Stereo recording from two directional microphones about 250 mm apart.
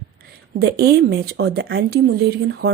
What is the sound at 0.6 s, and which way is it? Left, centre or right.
A woman's voice, right.